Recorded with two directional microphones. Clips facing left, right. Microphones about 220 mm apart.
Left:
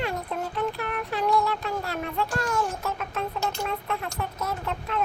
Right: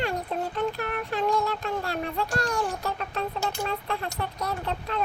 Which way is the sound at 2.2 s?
35° right (ahead or behind).